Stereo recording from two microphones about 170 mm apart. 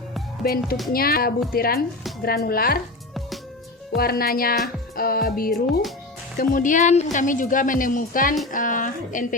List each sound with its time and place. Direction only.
0.4 s speech: 60° left (ahead or behind)
3.9 s a woman's voice: 60° left (ahead or behind)